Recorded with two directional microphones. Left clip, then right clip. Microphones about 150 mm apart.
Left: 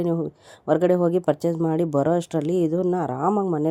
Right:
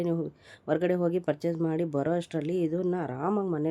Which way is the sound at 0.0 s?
20° left (ahead or behind).